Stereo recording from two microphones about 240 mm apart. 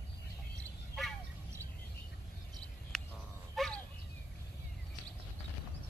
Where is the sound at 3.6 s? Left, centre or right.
Centre.